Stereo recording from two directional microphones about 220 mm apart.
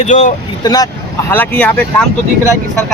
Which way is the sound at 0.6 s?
15° left (ahead or behind).